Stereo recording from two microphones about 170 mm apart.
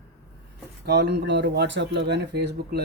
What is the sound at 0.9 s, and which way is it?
Speech, 85° right.